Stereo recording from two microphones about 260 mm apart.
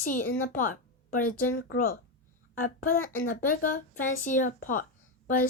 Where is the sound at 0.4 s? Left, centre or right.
Left.